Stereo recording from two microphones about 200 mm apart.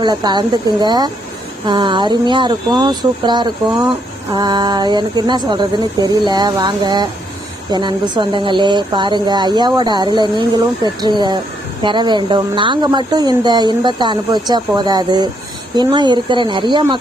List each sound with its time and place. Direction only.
0.0 s speech: 20° right (ahead or behind)